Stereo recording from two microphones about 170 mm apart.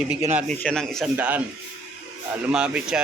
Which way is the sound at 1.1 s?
10° right (ahead or behind).